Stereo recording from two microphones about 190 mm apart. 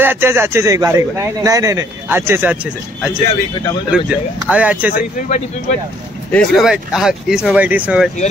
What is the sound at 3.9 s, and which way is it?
A man's voice, 5° right (ahead or behind).